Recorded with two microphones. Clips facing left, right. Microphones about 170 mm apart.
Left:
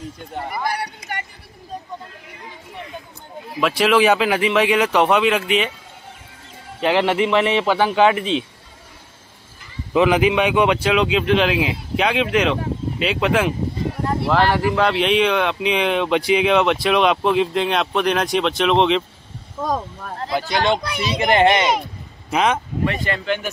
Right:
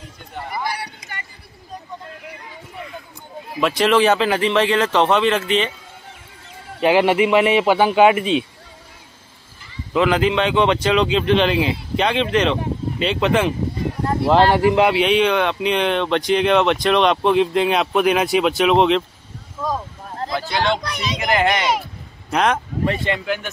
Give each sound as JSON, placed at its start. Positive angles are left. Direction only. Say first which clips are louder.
{"t": 0.7, "sound": "a sound", "louder": "left 3 dB", "side_deg": 55}
{"t": 3.6, "sound": "speech", "louder": "even", "side_deg": 5}
{"t": 6.8, "sound": "speech", "louder": "right 3 dB", "side_deg": -10}
{"t": 9.9, "sound": "speech", "louder": "left 1 dB", "side_deg": 15}
{"t": 14.2, "sound": "speech", "louder": "right 4 dB", "side_deg": -25}
{"t": 14.9, "sound": "speech", "louder": "right 1 dB", "side_deg": 0}
{"t": 20.2, "sound": "speech", "louder": "left 2 dB", "side_deg": 15}
{"t": 21.2, "sound": "a child's voice", "louder": "left 4 dB", "side_deg": 25}
{"t": 22.3, "sound": "speech", "louder": "even", "side_deg": 0}
{"t": 22.8, "sound": "speech", "louder": "right 2 dB", "side_deg": -20}
{"t": 23.2, "sound": "speech", "louder": "left 1 dB", "side_deg": -5}